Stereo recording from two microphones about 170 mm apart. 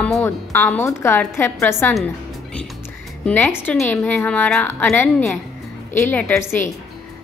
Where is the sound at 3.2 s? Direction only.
10° left (ahead or behind).